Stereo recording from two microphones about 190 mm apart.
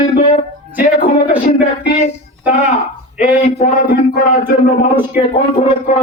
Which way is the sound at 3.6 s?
45° left (ahead or behind).